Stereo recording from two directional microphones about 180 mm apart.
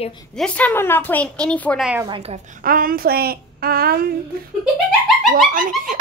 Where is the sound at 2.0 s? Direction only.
30° right (ahead or behind); by 4.1 s 55° right (ahead or behind).